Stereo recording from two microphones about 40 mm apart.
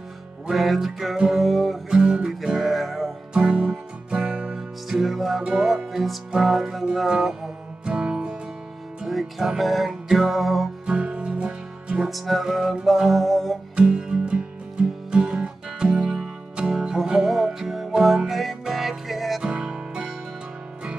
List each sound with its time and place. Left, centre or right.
0.6 s music: centre
1.4 s music: centre
1.9 s music: right
2.4 s music: centre
3.3 s music: right
4.6 s music: centre
7.8 s music: right
9.0 s music: centre
10.9 s music: right
12.1 s music: centre
13.7 s music: right; by 19.4 s centre
19.4 s music: right